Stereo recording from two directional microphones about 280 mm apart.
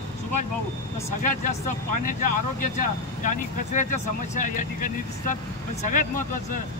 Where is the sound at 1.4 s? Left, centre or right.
Left.